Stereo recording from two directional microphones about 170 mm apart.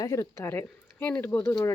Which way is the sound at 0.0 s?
20° left (ahead or behind).